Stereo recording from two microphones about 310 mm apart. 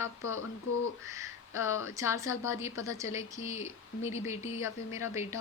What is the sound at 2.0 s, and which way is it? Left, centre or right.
Speech, centre.